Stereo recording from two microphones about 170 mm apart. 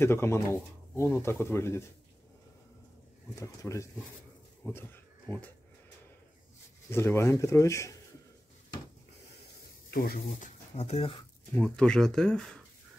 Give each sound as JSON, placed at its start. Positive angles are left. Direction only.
{"t": 0.0, "sound": "speech", "side_deg": 15}
{"t": 3.3, "sound": "speech", "side_deg": 20}
{"t": 6.9, "sound": "speech", "side_deg": 15}
{"t": 9.8, "sound": "speech", "side_deg": 60}
{"t": 10.8, "sound": "speech", "side_deg": 35}
{"t": 11.5, "sound": "speech", "side_deg": 5}